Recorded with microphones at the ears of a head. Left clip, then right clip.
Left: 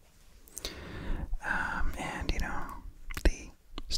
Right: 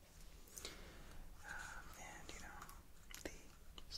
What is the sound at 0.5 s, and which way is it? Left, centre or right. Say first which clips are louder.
Whispering: left 13 dB; left.